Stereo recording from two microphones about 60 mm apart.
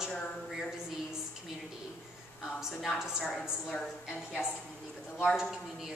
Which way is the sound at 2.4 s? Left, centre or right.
Centre.